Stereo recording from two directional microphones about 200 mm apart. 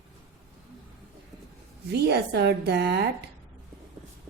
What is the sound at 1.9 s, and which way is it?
A woman's voice, 55° right (ahead or behind).